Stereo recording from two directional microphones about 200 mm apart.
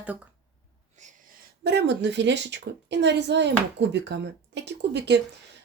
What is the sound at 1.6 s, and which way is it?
A woman's voice, 55° right (ahead or behind).